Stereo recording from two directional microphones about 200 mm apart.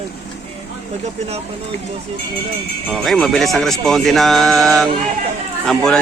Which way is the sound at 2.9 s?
Centre (ahead or behind).